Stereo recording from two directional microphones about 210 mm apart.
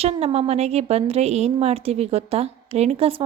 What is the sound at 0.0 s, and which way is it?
A woman's voice, 30° right (ahead or behind).